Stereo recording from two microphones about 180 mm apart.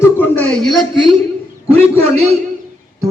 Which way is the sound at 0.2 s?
10° left (ahead or behind).